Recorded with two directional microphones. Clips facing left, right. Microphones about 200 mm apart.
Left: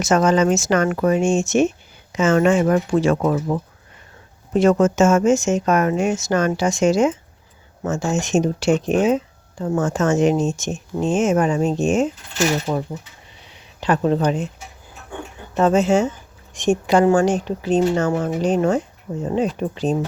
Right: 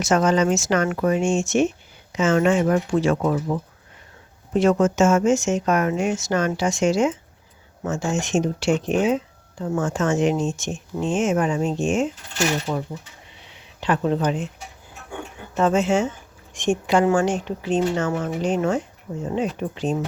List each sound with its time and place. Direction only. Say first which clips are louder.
0.0 s speech: left 2 dB; 45° left (ahead or behind)
15.5 s speech: left 3 dB; 40° left (ahead or behind)